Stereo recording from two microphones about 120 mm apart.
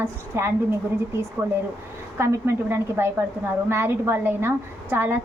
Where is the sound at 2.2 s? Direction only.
20° right (ahead or behind).